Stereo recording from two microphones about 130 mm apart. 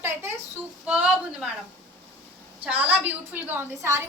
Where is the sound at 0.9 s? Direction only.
5° right (ahead or behind).